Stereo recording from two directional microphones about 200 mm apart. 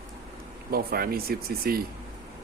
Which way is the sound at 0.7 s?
50° right (ahead or behind).